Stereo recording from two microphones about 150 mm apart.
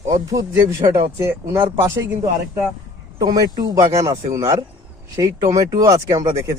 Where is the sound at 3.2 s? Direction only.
25° right (ahead or behind).